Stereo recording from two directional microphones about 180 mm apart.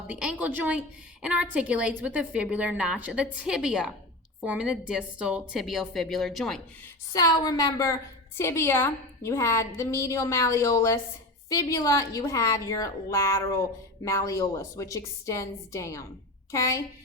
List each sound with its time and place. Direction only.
0.1 s a woman's voice: 5° right (ahead or behind)
7.1 s a woman's voice: 20° left (ahead or behind)